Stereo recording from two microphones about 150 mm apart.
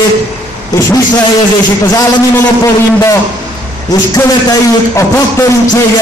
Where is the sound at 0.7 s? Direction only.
20° left (ahead or behind).